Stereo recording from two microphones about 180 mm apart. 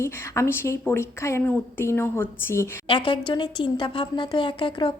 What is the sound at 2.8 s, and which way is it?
Speech, 30° left (ahead or behind).